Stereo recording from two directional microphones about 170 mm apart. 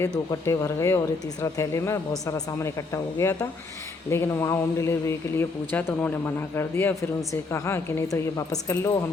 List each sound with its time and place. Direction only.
0.3 s speech: 20° left (ahead or behind)